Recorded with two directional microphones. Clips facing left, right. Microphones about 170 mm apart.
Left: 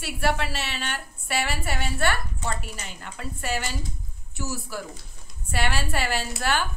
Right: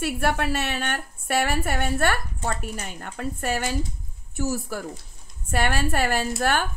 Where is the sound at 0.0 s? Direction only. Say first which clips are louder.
Right 3 dB; 55° right (ahead or behind).